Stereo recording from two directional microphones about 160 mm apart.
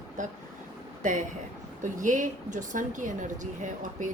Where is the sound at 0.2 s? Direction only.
50° right (ahead or behind).